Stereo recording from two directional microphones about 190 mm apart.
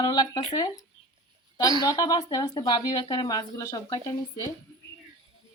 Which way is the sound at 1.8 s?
20° left (ahead or behind).